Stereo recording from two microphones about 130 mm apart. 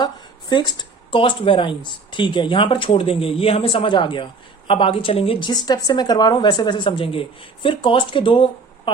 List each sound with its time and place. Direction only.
0.0 s speech: 35° left (ahead or behind)